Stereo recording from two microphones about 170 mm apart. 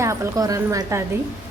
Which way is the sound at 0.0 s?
20° right (ahead or behind).